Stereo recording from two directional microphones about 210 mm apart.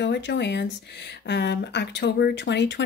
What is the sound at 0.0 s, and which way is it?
Speech, 55° left (ahead or behind).